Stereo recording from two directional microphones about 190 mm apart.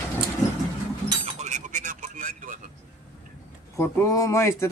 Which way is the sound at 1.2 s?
35° right (ahead or behind).